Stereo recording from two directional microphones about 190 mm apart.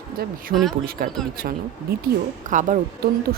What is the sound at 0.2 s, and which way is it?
Speech, 55° right (ahead or behind).